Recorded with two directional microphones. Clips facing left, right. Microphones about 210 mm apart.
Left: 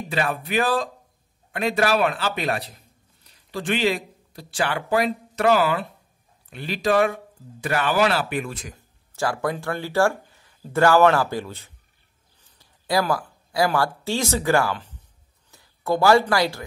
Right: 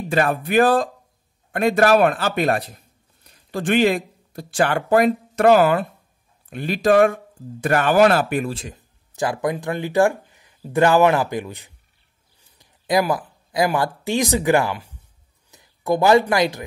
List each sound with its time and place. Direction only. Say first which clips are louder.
0.1 s a man's voice: right 6 dB; 50° right (ahead or behind)
8.5 s speech: right 6 dB; 30° right (ahead or behind)
8.7 s speech: right 3 dB; 20° right (ahead or behind)